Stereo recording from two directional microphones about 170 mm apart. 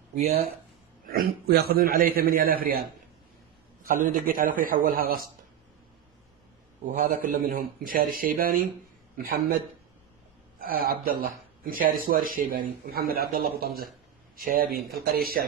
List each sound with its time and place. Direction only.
1.1 s speech: 60° right (ahead or behind)
3.8 s speech: 55° right (ahead or behind)
6.9 s a man's voice: 50° right (ahead or behind)
10.6 s speech: 60° right (ahead or behind)